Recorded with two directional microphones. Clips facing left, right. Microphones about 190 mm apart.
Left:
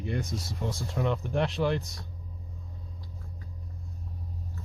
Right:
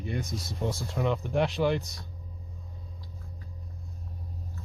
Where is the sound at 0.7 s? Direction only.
Centre (ahead or behind).